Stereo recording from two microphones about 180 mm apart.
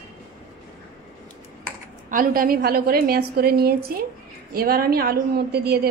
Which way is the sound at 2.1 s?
50° right (ahead or behind).